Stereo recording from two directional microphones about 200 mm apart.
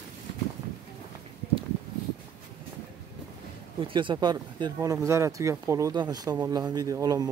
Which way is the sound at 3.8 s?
25° right (ahead or behind).